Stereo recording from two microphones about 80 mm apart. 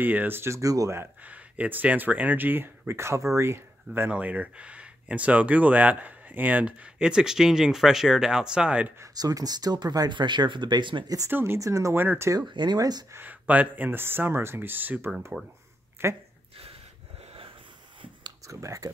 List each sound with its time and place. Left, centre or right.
0.0 s speech: right
1.2 s speech: centre
4.1 s speech: centre
9.1 s speech: right
11.2 s speech: right
11.6 s speech: right
12.0 s speech: right
12.4 s speech: right
13.1 s speech: right
18.5 s speech: right